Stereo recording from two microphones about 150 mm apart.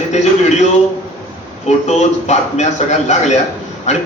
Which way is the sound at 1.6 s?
50° left (ahead or behind).